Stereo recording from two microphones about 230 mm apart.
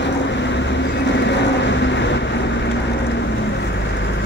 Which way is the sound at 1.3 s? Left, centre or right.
Left.